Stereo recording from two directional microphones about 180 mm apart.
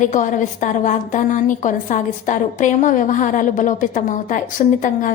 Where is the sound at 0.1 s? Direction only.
45° left (ahead or behind).